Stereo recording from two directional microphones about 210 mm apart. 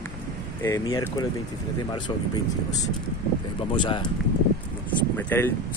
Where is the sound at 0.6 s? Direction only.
15° left (ahead or behind).